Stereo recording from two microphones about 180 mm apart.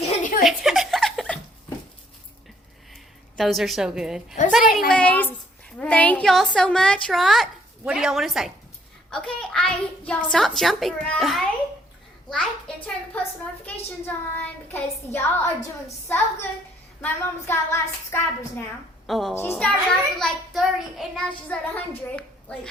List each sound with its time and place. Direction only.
0.1 s chuckle: 45° left (ahead or behind)
0.4 s chuckle: centre (ahead or behind)
3.3 s a child's voice: centre (ahead or behind)
4.9 s a woman's voice: 5° left (ahead or behind)
19.0 s a woman's voice: centre (ahead or behind)
19.3 s a child's voice: 10° left (ahead or behind)